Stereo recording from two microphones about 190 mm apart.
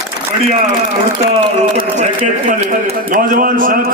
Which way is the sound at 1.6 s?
40° right (ahead or behind).